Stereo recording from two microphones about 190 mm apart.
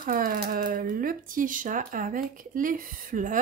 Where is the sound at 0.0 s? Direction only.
45° right (ahead or behind).